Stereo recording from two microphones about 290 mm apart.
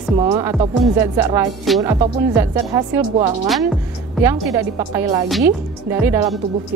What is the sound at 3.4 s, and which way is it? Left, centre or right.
Speech, centre.